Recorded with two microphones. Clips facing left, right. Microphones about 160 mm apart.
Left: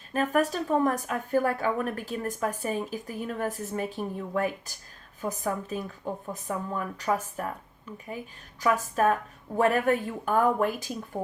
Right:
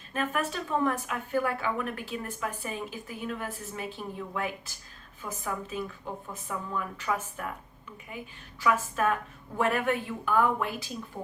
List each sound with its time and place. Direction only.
0.1 s a woman's voice: 40° left (ahead or behind)
8.6 s a woman's voice: 40° left (ahead or behind)